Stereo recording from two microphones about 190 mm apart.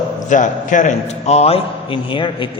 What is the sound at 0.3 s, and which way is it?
A man's voice, 40° left (ahead or behind).